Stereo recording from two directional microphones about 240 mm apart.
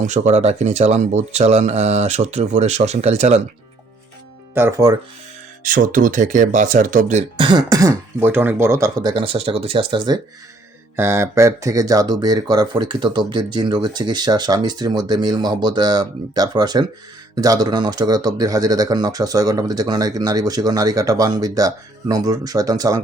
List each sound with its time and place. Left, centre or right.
0.0 s speech: right
4.5 s speech: centre
5.6 s speech: right; by 23.0 s centre